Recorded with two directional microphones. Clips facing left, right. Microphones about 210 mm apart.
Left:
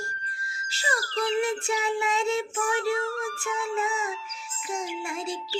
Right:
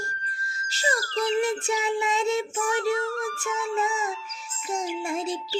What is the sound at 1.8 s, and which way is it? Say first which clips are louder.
Synthetic singing: right 1 dB; 20° right (ahead or behind).